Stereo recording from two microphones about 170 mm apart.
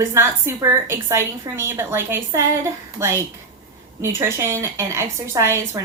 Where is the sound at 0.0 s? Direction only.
15° right (ahead or behind).